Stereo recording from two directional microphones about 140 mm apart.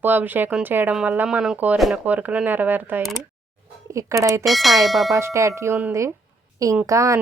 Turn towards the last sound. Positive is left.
turn(degrees=-20)  # may be behind; listen again after turning